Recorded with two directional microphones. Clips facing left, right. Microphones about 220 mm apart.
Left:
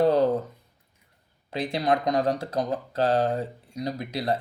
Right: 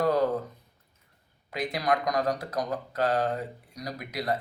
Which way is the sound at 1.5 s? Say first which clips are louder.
Left 3 dB; 30° left (ahead or behind).